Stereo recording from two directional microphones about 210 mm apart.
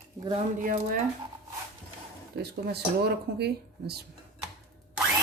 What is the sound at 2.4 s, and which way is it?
Speech, 50° right (ahead or behind).